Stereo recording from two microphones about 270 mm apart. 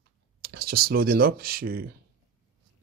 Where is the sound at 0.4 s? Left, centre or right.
Right.